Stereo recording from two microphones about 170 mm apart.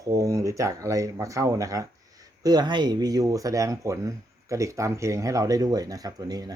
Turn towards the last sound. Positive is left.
turn(degrees=-20)  # may be behind; listen again after turning